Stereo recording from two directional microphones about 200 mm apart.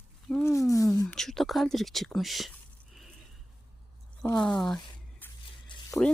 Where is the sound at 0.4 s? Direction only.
15° left (ahead or behind).